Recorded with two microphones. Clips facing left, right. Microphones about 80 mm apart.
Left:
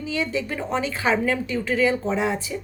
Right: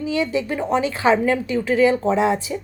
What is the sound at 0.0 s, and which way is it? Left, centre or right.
Speech, centre.